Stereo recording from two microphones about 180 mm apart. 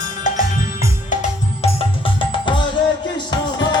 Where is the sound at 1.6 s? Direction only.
30° left (ahead or behind).